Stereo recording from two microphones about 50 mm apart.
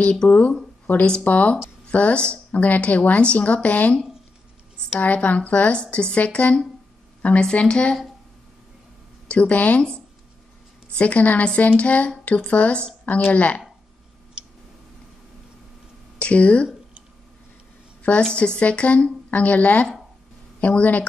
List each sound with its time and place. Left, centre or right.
0.0 s a woman's voice: centre
0.9 s a woman's voice: left
5.0 s a woman's voice: left
9.3 s a woman's voice: left
16.2 s a woman's voice: left
18.3 s a woman's voice: left